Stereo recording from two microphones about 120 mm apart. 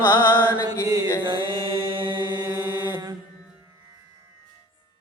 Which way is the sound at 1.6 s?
45° right (ahead or behind).